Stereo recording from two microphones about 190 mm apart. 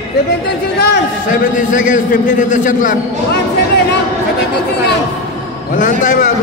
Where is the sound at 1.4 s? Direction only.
40° left (ahead or behind).